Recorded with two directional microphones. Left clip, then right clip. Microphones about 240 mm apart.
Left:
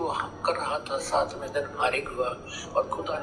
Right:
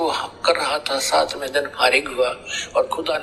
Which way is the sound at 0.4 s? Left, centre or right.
Right.